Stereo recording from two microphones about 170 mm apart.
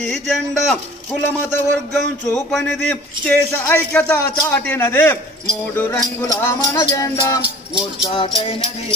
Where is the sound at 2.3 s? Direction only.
Centre (ahead or behind).